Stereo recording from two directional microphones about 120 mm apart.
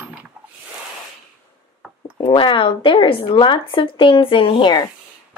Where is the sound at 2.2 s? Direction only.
45° left (ahead or behind).